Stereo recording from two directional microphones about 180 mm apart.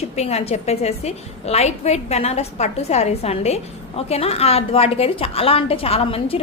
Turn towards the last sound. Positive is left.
turn(degrees=30)  # may be behind; listen again after turning